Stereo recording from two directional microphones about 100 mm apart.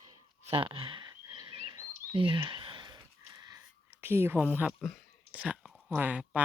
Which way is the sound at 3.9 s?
20° right (ahead or behind).